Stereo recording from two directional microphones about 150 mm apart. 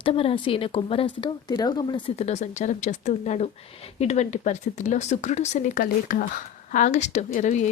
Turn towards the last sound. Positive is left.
turn(degrees=50)  # may be behind; listen again after turning